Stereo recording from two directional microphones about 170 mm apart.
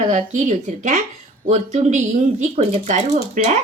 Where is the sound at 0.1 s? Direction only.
45° right (ahead or behind).